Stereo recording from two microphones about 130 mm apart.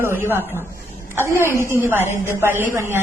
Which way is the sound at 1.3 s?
20° left (ahead or behind).